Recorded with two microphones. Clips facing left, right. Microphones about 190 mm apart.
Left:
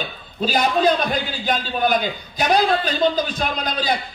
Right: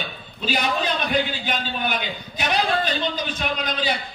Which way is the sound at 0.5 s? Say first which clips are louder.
Left 6 dB; 40° left (ahead or behind).